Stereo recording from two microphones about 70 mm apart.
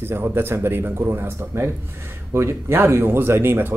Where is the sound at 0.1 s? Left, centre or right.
Right.